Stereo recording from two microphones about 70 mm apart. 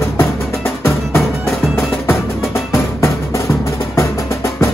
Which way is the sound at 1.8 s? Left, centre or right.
Left.